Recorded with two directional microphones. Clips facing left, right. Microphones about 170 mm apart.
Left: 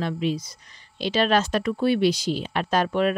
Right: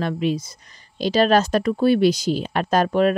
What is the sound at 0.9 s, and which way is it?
Speech, 40° right (ahead or behind).